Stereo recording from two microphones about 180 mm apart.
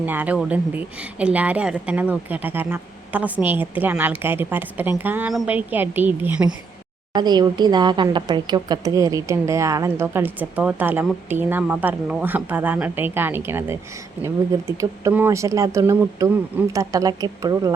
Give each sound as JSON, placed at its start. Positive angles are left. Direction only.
{"t": 0.0, "sound": "speech", "side_deg": -10}
{"t": 7.1, "sound": "speech", "side_deg": -25}